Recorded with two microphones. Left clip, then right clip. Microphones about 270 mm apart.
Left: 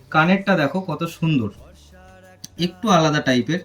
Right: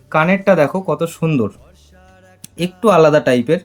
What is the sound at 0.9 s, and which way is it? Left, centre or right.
Speech, right.